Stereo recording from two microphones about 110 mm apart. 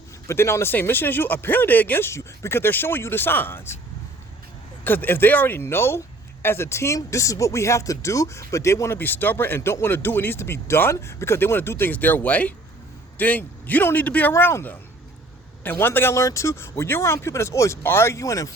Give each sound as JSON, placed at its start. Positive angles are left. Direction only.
{"t": 0.3, "sound": "speech", "side_deg": 25}
{"t": 4.8, "sound": "a man's voice", "side_deg": 15}